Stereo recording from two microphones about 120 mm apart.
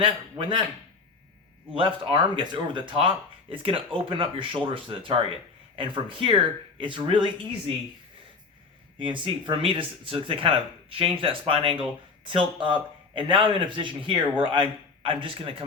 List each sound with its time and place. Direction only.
0.0 s speech: 40° right (ahead or behind)
1.7 s speech: 45° right (ahead or behind)
9.0 s speech: 45° right (ahead or behind)